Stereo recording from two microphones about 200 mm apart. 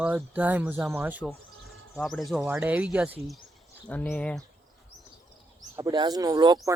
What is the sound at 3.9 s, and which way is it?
Speech, 5° left (ahead or behind).